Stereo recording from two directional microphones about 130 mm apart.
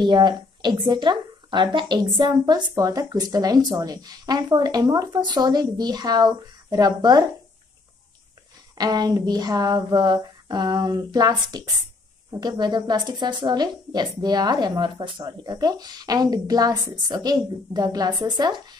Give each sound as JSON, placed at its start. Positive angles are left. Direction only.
{"t": 0.0, "sound": "speech", "side_deg": -35}
{"t": 8.7, "sound": "speech", "side_deg": -30}